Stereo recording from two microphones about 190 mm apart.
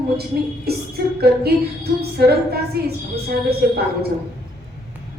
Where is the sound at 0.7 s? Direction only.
55° right (ahead or behind).